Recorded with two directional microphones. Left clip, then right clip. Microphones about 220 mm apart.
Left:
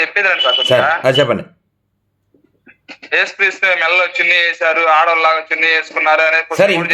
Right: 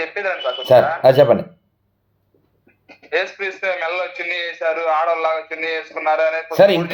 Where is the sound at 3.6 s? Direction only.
35° left (ahead or behind).